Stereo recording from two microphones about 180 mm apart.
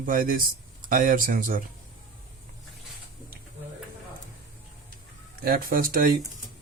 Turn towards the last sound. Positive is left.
turn(degrees=-55)  # may be behind; listen again after turning